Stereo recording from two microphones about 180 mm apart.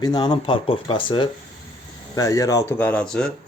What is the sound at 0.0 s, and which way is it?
Speech, 25° left (ahead or behind).